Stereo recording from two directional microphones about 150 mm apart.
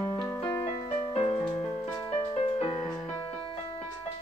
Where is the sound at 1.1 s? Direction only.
40° left (ahead or behind).